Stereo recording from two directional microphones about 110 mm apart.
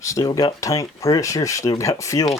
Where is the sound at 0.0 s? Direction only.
30° left (ahead or behind).